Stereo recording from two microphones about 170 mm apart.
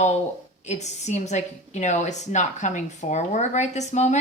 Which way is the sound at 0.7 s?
40° left (ahead or behind).